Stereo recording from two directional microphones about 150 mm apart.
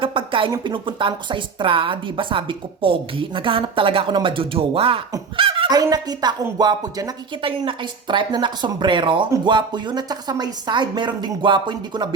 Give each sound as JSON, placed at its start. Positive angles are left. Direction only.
{"t": 0.0, "sound": "speech", "side_deg": -35}